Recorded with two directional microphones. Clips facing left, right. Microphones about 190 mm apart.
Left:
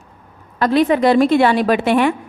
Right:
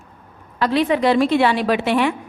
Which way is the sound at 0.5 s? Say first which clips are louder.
Left 4 dB; 45° left (ahead or behind).